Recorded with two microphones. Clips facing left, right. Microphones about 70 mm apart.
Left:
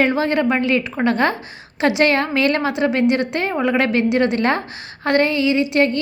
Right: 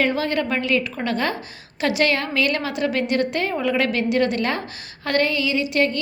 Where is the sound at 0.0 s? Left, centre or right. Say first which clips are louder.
Left 4 dB; left.